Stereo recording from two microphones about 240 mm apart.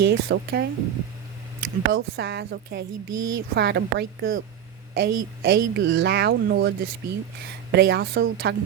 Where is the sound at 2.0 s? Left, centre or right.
Right.